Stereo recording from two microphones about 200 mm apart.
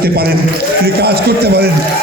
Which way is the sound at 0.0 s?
50° right (ahead or behind).